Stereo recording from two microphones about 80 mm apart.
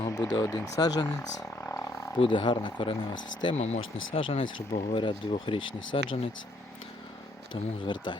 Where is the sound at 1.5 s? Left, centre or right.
Left.